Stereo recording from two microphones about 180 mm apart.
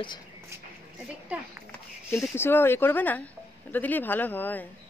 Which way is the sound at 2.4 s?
10° left (ahead or behind).